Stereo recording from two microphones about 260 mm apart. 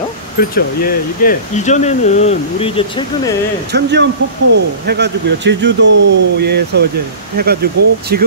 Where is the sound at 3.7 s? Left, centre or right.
Right.